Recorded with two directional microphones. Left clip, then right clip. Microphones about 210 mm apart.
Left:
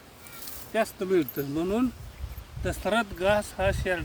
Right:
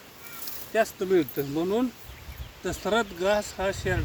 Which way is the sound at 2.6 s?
10° left (ahead or behind).